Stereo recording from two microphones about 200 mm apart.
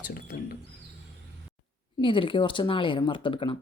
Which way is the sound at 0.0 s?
45° left (ahead or behind).